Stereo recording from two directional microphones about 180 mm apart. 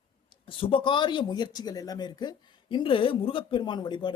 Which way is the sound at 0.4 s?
30° left (ahead or behind).